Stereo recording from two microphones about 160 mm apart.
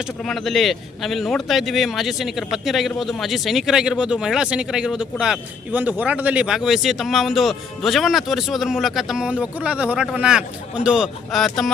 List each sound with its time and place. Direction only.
0.0 s speech: centre (ahead or behind)